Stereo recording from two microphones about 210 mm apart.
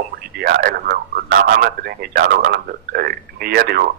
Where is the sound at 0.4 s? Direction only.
45° right (ahead or behind).